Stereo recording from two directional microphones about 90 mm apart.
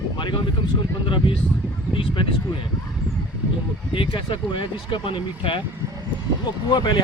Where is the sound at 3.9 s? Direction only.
70° left (ahead or behind).